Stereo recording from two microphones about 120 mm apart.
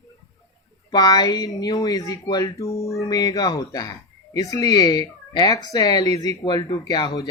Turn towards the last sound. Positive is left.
turn(degrees=35)  # may be behind; listen again after turning